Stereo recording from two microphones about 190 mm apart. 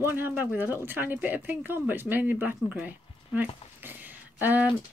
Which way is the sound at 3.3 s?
10° right (ahead or behind).